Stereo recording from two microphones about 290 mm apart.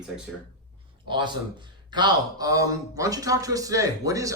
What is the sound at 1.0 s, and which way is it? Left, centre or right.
A man's voice, centre.